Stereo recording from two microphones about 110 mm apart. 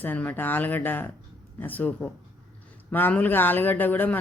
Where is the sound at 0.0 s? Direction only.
15° left (ahead or behind).